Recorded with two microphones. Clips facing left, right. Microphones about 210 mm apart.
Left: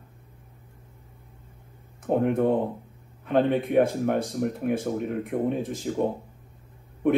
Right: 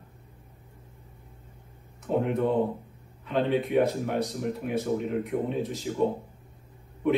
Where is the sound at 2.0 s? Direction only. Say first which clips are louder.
Left 3 dB; 50° left (ahead or behind).